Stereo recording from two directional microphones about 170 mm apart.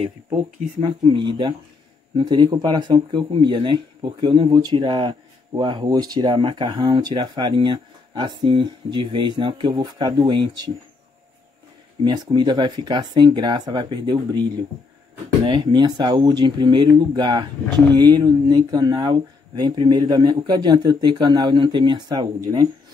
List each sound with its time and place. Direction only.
0.0 s speech: 40° right (ahead or behind)
0.7 s speech: 25° right (ahead or behind)
12.0 s speech: 30° right (ahead or behind)